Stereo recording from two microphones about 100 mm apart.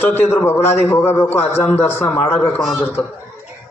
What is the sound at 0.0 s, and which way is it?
A man's voice, 20° left (ahead or behind).